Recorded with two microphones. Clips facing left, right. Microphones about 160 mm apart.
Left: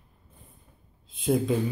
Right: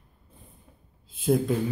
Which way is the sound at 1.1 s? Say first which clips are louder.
Right 1 dB; centre (ahead or behind).